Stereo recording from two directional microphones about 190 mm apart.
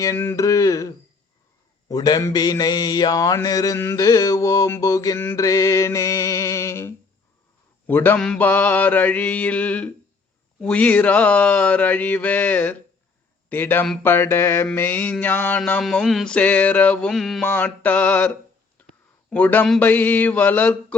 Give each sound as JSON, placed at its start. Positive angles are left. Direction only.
{"t": 0.0, "sound": "mantra", "side_deg": 15}
{"t": 19.3, "sound": "mantra", "side_deg": 10}